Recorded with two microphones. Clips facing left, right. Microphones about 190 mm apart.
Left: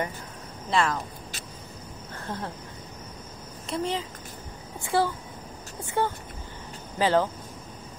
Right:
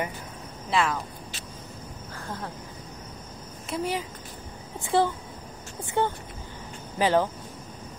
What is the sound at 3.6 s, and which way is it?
Speech, centre (ahead or behind).